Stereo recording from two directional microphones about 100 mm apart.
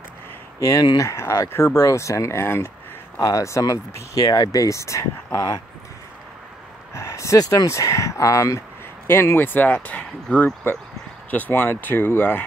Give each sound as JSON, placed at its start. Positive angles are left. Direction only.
{"t": 0.6, "sound": "speech", "side_deg": 35}
{"t": 3.2, "sound": "speech", "side_deg": 35}
{"t": 6.9, "sound": "speech", "side_deg": 30}